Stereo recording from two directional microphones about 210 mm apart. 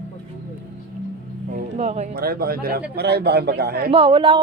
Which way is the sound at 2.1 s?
45° right (ahead or behind).